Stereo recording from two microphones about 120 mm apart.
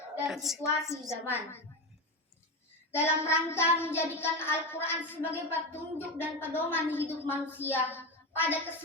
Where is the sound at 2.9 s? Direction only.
20° left (ahead or behind).